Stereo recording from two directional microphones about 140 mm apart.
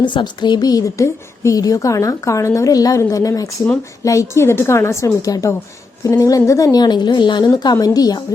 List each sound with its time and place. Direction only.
0.0 s speech: 35° left (ahead or behind)